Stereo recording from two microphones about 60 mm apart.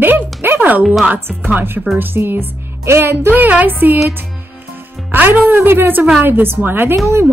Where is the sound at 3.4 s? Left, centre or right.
Right.